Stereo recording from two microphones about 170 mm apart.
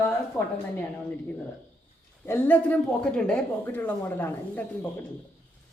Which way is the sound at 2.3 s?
10° left (ahead or behind).